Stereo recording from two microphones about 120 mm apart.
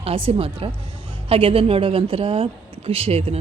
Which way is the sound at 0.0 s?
55° right (ahead or behind).